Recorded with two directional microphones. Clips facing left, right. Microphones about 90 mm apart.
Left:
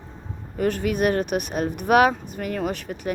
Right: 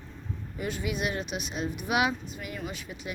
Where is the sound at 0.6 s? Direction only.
55° left (ahead or behind).